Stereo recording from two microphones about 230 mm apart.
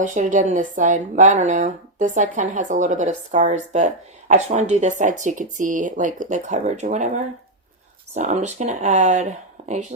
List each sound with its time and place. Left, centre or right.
0.0 s speech: right